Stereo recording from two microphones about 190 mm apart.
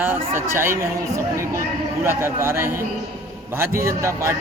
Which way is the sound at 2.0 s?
10° right (ahead or behind).